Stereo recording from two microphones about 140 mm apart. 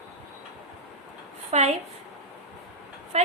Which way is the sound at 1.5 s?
55° right (ahead or behind).